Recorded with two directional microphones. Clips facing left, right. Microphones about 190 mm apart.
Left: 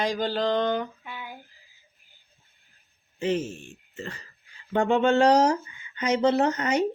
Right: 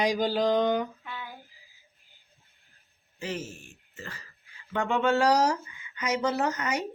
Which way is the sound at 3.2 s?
25° left (ahead or behind).